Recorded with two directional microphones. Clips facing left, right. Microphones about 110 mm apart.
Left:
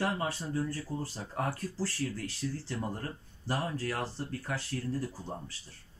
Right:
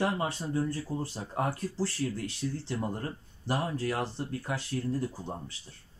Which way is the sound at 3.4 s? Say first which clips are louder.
Right 3 dB; 15° right (ahead or behind).